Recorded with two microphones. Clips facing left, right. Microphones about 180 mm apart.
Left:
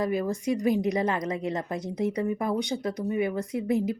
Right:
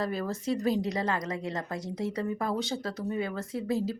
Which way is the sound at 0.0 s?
15° left (ahead or behind).